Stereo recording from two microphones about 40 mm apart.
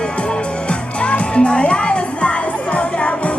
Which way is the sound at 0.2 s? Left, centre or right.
Left.